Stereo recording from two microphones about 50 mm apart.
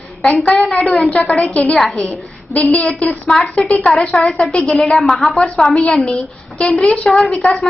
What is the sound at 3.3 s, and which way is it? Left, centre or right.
Speech, centre.